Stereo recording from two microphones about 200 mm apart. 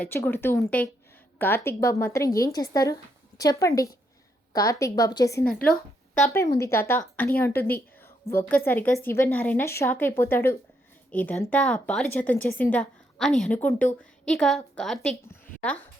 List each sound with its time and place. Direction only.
0.0 s a woman's voice: 10° left (ahead or behind)